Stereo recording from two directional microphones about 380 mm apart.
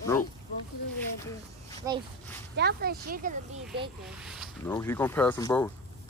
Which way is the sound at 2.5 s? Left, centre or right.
Right.